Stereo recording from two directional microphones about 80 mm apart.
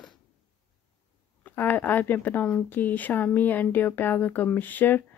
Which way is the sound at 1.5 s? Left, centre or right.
Left.